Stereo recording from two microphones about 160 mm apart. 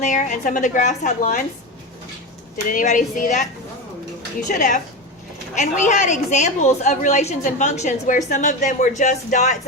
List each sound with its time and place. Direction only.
0.0 s a woman's voice: 50° left (ahead or behind)
2.6 s a woman's voice: 50° left (ahead or behind)